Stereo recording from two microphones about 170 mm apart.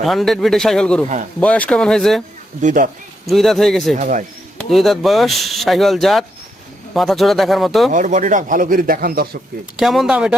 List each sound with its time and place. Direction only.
0.0 s speech: centre (ahead or behind)
2.6 s speech: 45° right (ahead or behind)
3.2 s speech: centre (ahead or behind)
3.9 s speech: 50° right (ahead or behind)
4.7 s speech: centre (ahead or behind)
7.9 s speech: 50° right (ahead or behind)
9.7 s speech: centre (ahead or behind)